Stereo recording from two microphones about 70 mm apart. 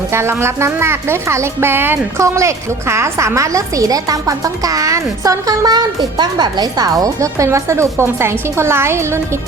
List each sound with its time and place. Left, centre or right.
0.1 s speech: right
2.1 s a woman's voice: right